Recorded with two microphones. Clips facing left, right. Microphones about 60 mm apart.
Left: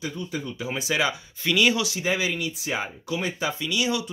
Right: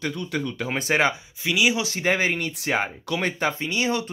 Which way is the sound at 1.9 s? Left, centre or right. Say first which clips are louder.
Right 3 dB; right.